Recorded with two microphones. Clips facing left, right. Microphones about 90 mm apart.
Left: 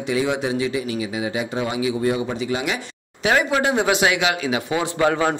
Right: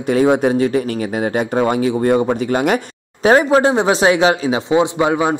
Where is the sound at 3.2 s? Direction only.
35° right (ahead or behind).